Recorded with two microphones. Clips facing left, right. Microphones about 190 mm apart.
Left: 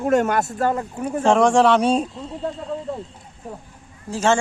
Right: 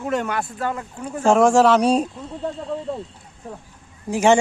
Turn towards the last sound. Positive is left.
turn(degrees=-15)  # may be behind; listen again after turning